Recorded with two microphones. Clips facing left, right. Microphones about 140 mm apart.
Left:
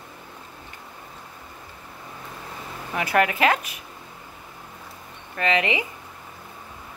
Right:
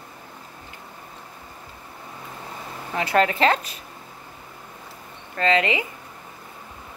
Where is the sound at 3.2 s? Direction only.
15° left (ahead or behind).